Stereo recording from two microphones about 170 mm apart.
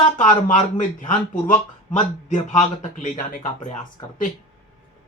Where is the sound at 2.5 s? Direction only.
45° left (ahead or behind).